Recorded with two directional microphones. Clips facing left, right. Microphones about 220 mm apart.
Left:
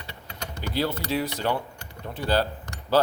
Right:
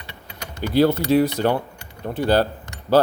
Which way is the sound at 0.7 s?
50° right (ahead or behind).